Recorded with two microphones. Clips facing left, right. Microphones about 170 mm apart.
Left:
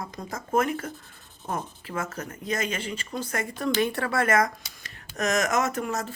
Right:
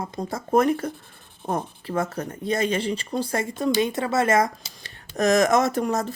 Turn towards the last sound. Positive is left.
turn(degrees=-35)  # may be behind; listen again after turning